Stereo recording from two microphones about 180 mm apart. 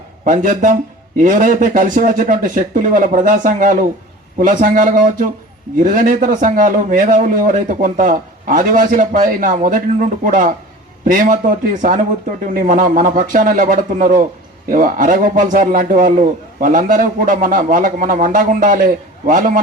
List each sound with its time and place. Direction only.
0.3 s a man's voice: 45° right (ahead or behind)